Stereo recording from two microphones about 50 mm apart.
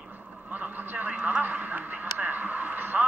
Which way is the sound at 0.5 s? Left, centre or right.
Right.